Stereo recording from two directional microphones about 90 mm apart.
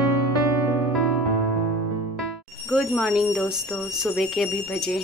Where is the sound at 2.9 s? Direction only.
Centre (ahead or behind).